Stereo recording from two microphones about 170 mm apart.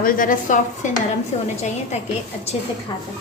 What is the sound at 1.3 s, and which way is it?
Speech, 35° left (ahead or behind).